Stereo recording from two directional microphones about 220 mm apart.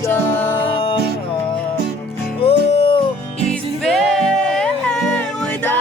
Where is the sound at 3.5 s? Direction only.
Centre (ahead or behind).